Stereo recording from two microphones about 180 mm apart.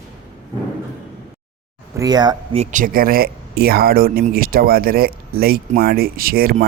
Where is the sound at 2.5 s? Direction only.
40° right (ahead or behind).